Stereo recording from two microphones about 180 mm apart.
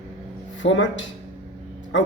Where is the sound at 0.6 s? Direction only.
90° left.